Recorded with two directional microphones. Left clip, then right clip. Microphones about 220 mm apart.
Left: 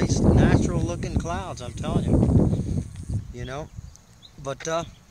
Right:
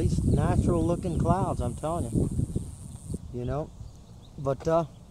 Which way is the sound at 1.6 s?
20° left (ahead or behind).